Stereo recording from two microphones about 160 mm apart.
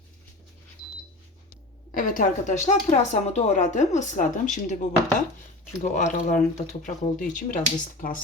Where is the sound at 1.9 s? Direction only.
55° left (ahead or behind).